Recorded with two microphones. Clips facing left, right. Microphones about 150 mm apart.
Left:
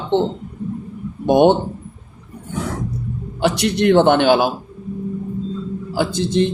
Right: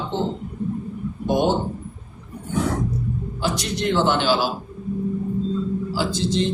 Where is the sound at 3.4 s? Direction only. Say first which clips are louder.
Left 9 dB; 65° left (ahead or behind).